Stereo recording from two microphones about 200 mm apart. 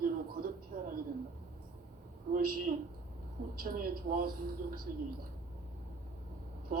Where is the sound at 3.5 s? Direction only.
45° right (ahead or behind).